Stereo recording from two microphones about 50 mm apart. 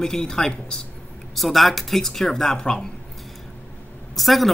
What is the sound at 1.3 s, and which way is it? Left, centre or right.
Speech, centre.